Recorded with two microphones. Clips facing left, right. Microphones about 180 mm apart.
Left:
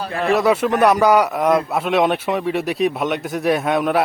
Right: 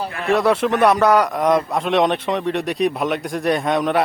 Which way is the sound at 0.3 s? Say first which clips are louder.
Even; centre (ahead or behind).